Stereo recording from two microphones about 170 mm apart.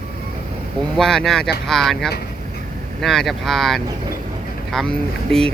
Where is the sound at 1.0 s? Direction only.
5° left (ahead or behind).